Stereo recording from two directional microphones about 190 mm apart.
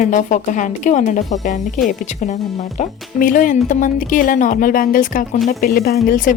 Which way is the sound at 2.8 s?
45° left (ahead or behind).